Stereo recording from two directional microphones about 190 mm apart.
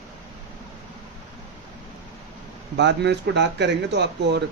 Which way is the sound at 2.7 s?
65° right (ahead or behind).